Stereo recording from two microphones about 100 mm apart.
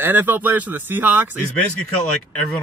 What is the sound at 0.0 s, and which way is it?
Speech, 20° right (ahead or behind).